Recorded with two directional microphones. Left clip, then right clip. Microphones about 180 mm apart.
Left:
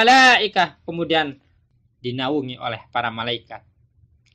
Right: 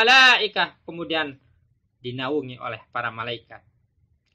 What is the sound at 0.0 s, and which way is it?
Speech, 35° left (ahead or behind).